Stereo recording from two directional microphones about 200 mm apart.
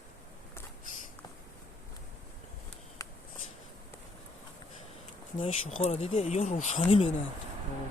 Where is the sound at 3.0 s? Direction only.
15° left (ahead or behind).